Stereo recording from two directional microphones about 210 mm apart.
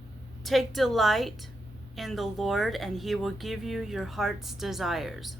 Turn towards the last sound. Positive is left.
turn(degrees=0)  # may be behind; listen again after turning